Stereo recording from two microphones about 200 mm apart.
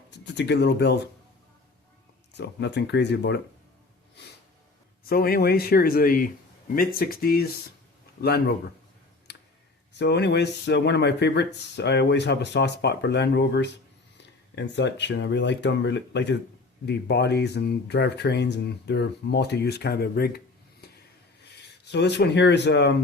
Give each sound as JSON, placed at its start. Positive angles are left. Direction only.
{"t": 0.1, "sound": "speech", "side_deg": 60}
{"t": 2.3, "sound": "speech", "side_deg": 60}
{"t": 5.0, "sound": "speech", "side_deg": 50}
{"t": 9.3, "sound": "a sound", "side_deg": 55}
{"t": 10.0, "sound": "speech", "side_deg": 60}
{"t": 20.8, "sound": "a sound", "side_deg": 55}
{"t": 21.5, "sound": "speech", "side_deg": 55}